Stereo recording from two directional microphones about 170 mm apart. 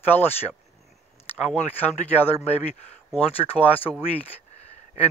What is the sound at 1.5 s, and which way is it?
Speech, 10° left (ahead or behind).